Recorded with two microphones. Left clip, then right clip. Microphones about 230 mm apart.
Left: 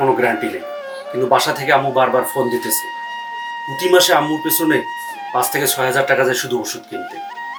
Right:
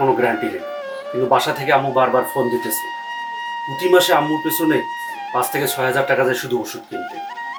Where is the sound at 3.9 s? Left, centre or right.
Centre.